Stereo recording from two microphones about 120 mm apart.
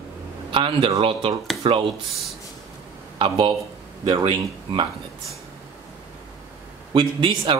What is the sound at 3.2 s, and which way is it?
Speech, 45° right (ahead or behind).